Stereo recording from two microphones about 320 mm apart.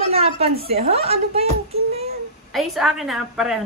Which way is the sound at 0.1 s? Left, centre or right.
Centre.